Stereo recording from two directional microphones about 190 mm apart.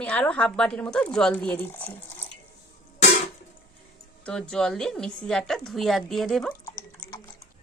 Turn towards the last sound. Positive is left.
turn(degrees=15)  # may be behind; listen again after turning